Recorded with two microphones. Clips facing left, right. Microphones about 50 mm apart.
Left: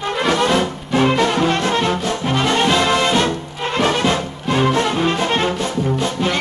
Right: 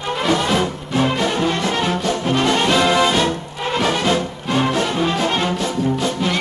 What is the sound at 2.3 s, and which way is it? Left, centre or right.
Brass instrument, centre.